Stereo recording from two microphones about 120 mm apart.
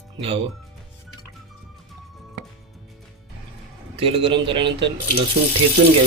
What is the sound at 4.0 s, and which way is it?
Speech, 50° right (ahead or behind).